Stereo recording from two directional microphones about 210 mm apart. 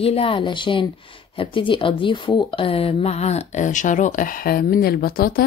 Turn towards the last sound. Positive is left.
turn(degrees=45)  # may be behind; listen again after turning